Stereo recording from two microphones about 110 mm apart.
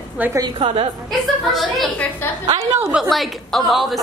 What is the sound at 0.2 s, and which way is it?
Speech, 15° right (ahead or behind).